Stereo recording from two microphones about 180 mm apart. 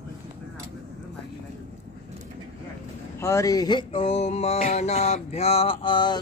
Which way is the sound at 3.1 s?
15° left (ahead or behind).